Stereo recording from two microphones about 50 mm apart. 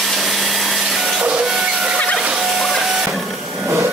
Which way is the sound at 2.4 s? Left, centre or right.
Centre.